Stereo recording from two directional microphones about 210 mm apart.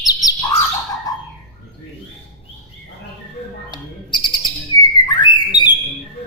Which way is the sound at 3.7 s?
20° left (ahead or behind).